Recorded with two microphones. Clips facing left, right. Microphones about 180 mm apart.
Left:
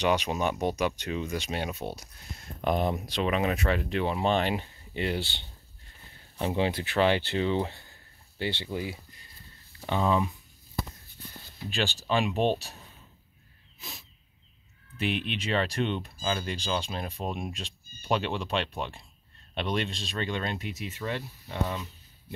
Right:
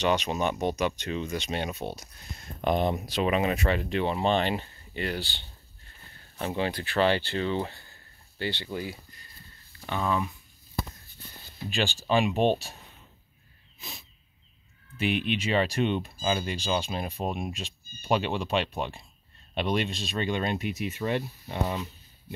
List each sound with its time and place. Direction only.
0.0 s speech: 10° left (ahead or behind)
4.9 s speech: 25° left (ahead or behind)
11.7 s speech: centre (ahead or behind)
13.7 s a sound: centre (ahead or behind)
15.0 s speech: 5° right (ahead or behind)